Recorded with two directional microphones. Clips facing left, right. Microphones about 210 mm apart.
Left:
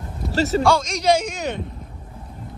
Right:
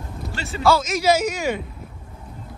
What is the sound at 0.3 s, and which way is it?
Speech, 40° left (ahead or behind).